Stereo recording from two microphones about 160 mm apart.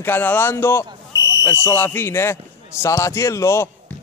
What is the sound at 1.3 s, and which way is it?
Fire alarm, 20° left (ahead or behind).